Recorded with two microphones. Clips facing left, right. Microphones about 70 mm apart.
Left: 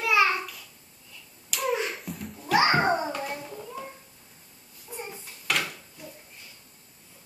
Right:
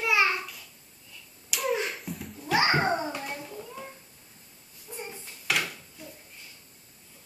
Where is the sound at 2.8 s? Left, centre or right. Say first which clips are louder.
Left 2 dB; centre.